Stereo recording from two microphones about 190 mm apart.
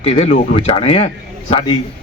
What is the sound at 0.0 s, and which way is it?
A man's voice, 30° left (ahead or behind).